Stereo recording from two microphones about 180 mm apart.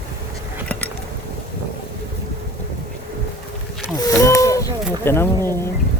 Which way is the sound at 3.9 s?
20° left (ahead or behind).